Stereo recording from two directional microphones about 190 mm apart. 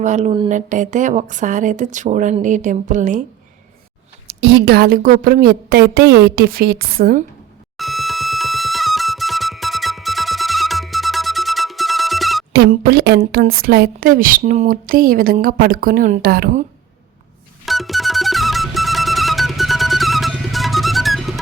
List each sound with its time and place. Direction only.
0.0 s a woman's voice: 40° right (ahead or behind)
4.3 s a woman's voice: 60° right (ahead or behind)
7.8 s music: centre (ahead or behind)
12.5 s a woman's voice: 55° right (ahead or behind)
17.7 s music: centre (ahead or behind)